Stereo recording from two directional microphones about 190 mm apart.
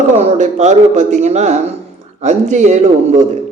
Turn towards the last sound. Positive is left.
turn(degrees=-40)  # may be behind; listen again after turning